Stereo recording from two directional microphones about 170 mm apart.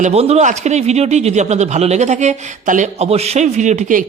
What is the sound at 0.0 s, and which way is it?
Speech, 35° right (ahead or behind).